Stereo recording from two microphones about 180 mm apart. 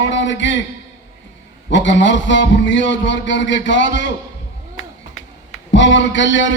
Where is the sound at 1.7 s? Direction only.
85° left.